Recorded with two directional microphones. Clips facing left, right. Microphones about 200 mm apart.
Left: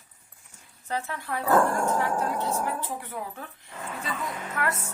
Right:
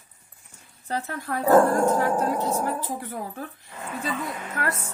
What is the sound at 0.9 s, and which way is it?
Speech, 40° right (ahead or behind).